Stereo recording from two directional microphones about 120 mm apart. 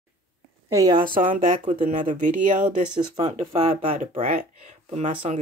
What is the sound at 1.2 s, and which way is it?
Speech, 90° right.